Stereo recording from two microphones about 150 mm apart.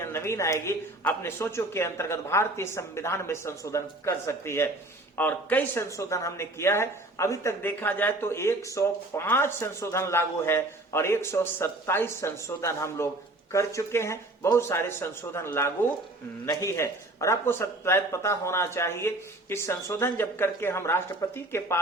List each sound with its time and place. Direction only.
0.0 s a woman's voice: 15° left (ahead or behind)